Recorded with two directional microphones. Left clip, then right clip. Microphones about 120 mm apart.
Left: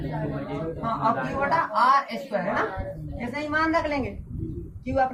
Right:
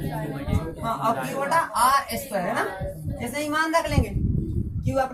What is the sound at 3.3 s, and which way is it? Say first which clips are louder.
Speech: right 1 dB; 35° right (ahead or behind).